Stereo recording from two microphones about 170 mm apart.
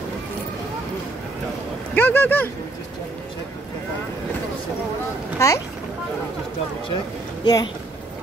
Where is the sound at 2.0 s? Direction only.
10° left (ahead or behind).